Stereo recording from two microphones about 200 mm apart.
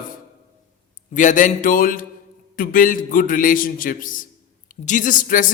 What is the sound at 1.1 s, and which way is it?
A man's voice, 40° left (ahead or behind).